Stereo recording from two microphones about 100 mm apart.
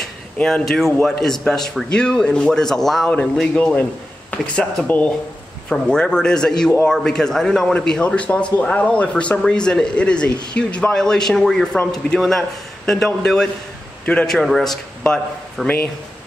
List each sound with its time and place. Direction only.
0.4 s a man's voice: 5° left (ahead or behind)